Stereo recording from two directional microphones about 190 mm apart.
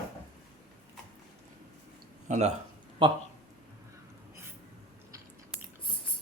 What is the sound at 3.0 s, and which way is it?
Speech, 25° right (ahead or behind).